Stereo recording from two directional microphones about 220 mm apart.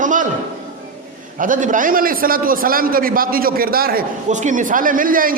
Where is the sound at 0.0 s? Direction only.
35° right (ahead or behind).